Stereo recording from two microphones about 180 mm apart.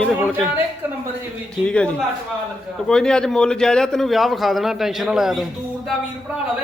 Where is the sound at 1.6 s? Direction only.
5° left (ahead or behind).